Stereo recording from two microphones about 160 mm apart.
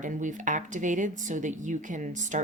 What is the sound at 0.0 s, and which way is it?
Speech, 55° right (ahead or behind).